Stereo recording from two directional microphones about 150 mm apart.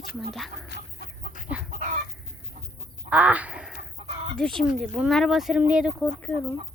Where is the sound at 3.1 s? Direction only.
10° right (ahead or behind).